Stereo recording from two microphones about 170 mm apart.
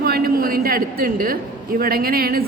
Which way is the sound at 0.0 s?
60° right (ahead or behind).